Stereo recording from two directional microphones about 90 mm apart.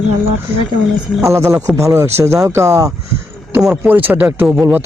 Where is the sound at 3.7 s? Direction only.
20° right (ahead or behind).